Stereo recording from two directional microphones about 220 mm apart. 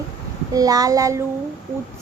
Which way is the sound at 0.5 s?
15° right (ahead or behind).